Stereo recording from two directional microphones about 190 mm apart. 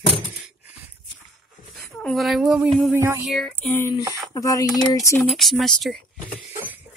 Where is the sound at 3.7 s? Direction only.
15° left (ahead or behind).